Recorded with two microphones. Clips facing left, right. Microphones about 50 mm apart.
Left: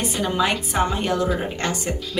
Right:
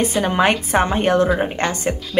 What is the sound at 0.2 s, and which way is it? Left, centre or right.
A woman's voice, right.